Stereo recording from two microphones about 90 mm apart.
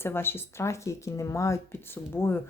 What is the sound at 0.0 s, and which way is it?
Speech, 25° left (ahead or behind).